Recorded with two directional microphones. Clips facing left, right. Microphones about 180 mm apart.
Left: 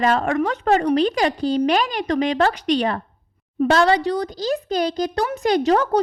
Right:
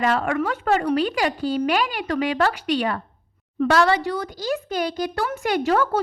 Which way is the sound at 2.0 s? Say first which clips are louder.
Left 3 dB; 25° left (ahead or behind).